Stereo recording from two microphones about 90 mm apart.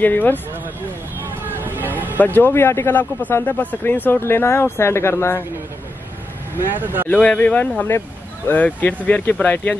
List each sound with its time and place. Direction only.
0.0 s a man's voice: 20° left (ahead or behind)
1.2 s a sound: 20° right (ahead or behind)
2.1 s a man's voice: 20° left (ahead or behind)
6.8 s speech: 20° right (ahead or behind)
7.1 s speech: 15° left (ahead or behind)